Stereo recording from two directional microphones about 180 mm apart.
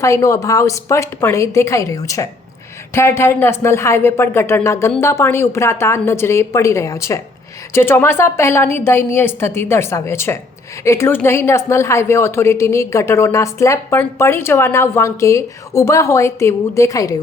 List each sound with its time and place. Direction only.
0.0 s a woman's voice: 15° left (ahead or behind)